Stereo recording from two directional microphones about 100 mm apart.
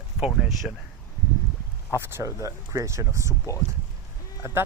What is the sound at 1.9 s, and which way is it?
Speech, 25° right (ahead or behind).